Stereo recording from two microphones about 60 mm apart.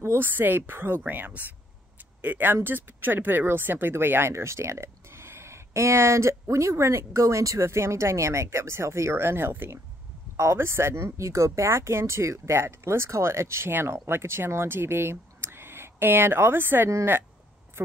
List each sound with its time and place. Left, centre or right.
0.0 s a woman's voice: right
10.3 s speech: right